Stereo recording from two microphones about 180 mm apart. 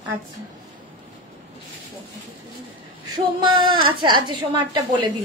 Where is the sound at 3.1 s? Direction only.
25° right (ahead or behind).